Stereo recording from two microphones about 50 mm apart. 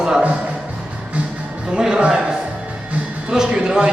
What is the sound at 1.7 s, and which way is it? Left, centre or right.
Music, centre.